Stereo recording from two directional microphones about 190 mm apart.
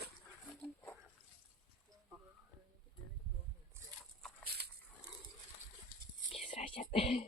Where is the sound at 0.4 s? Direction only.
Centre (ahead or behind).